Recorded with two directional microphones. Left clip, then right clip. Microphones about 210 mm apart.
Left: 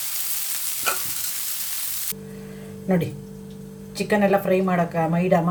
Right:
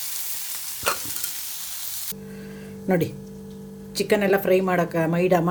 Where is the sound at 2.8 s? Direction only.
45° right (ahead or behind).